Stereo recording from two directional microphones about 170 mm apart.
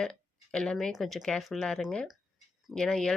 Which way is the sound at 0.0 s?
5° left (ahead or behind).